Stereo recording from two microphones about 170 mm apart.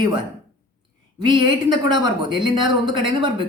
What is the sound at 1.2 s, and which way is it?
Speech, 25° right (ahead or behind).